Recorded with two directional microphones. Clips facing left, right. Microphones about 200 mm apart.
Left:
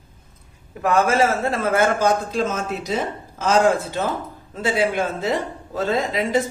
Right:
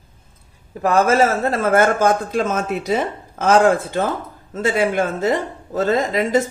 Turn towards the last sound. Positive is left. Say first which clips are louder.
# right 3 dB
turn(degrees=-45)  # may be behind; listen again after turning